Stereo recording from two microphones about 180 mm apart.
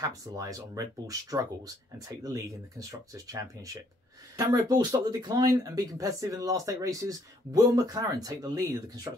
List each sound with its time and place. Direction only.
0.0 s speech: 20° right (ahead or behind)